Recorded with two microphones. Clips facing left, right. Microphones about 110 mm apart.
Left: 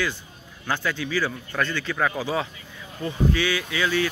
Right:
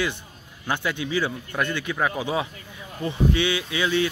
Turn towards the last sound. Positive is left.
turn(degrees=-25)  # may be behind; listen again after turning